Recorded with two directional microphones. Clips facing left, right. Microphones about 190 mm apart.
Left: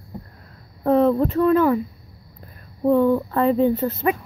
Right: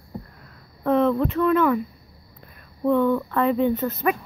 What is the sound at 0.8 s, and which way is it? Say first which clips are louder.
Speech: left 3 dB; 35° left (ahead or behind).